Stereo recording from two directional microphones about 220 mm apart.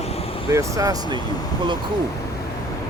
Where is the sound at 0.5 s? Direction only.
15° right (ahead or behind).